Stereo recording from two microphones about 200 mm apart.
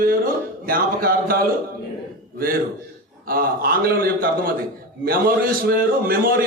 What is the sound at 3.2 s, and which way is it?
A man's voice, 45° right (ahead or behind).